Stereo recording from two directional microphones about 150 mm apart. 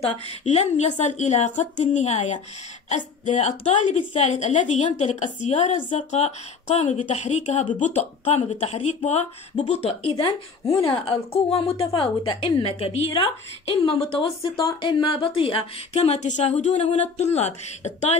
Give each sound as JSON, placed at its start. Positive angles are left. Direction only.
{"t": 0.4, "sound": "a woman's voice", "side_deg": 45}